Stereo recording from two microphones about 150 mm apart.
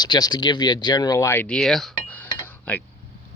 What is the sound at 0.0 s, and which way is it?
Speech, 30° left (ahead or behind).